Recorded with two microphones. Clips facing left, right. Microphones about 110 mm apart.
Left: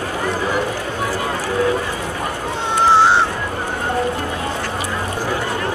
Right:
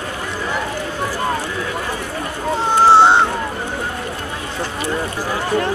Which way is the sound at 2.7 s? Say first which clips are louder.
Right 3 dB; 30° right (ahead or behind).